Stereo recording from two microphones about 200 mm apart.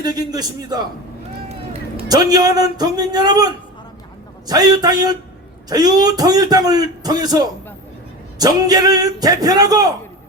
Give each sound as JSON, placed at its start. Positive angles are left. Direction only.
{"t": 0.0, "sound": "a man's voice", "side_deg": -20}
{"t": 1.5, "sound": "a sound", "side_deg": -30}
{"t": 2.0, "sound": "a man's voice", "side_deg": -20}